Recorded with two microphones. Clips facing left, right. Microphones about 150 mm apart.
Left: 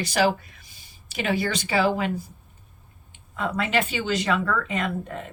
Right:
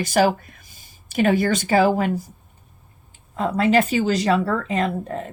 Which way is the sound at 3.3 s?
35° right (ahead or behind).